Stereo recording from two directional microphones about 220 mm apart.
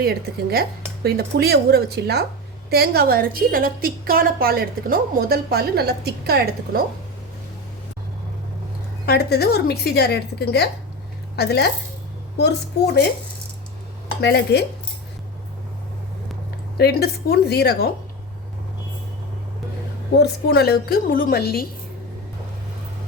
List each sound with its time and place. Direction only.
0.0 s a woman's voice: 45° right (ahead or behind)
9.0 s a woman's voice: 45° left (ahead or behind)
14.2 s a woman's voice: 50° left (ahead or behind)
16.7 s a woman's voice: 45° left (ahead or behind)
20.1 s a woman's voice: 45° left (ahead or behind)